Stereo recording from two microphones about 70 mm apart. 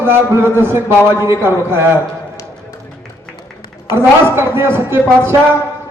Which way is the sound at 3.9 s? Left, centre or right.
Right.